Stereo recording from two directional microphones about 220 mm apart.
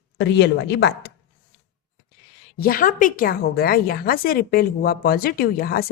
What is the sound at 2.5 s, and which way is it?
A woman's voice, 40° left (ahead or behind).